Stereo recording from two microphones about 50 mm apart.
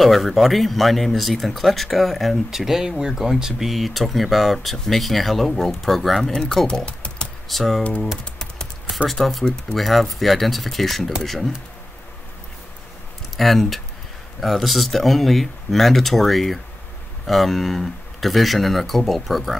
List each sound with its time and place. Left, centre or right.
0.0 s speech: centre
6.7 s a sound: left
7.4 s speech: centre
8.9 s speech: centre
13.4 s speech: centre